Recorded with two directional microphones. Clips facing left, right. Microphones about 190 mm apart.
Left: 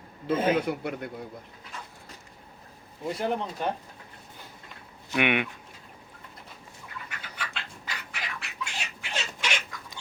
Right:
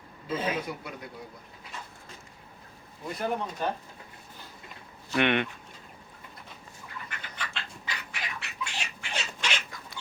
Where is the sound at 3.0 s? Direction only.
25° left (ahead or behind).